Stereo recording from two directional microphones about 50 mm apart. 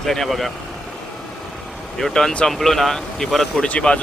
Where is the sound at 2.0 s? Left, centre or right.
Centre.